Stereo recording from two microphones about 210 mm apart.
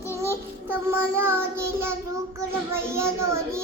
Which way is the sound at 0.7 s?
10° right (ahead or behind).